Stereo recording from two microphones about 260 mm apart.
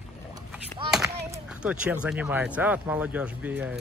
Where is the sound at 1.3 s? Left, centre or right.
Centre.